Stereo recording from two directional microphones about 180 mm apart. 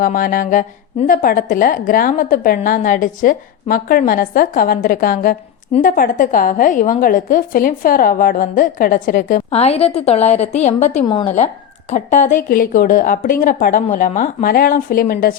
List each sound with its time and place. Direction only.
0.0 s a woman's voice: 55° left (ahead or behind)
9.5 s a woman's voice: 35° left (ahead or behind)
11.0 s a woman's voice: 25° left (ahead or behind); by 15.4 s 55° left (ahead or behind)